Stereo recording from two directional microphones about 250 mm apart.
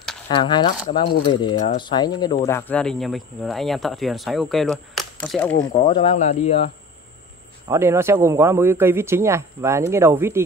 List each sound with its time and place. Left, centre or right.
0.3 s speech: centre
5.8 s speech: left
7.6 s a man's voice: centre